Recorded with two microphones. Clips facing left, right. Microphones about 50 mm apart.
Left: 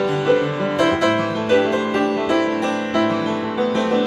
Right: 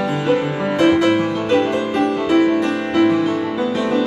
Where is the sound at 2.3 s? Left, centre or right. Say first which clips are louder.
Right 4 dB; centre.